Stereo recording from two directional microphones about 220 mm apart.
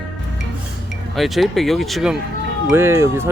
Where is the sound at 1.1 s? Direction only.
Centre (ahead or behind).